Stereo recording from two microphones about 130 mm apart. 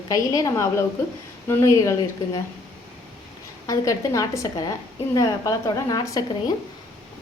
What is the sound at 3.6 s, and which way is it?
A woman's voice, 25° left (ahead or behind).